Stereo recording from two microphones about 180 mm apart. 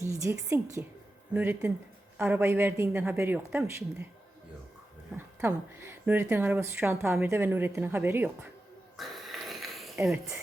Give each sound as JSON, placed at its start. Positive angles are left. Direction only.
{"t": 0.0, "sound": "speech", "side_deg": -15}
{"t": 5.1, "sound": "speech", "side_deg": -10}
{"t": 9.0, "sound": "a sound", "side_deg": 0}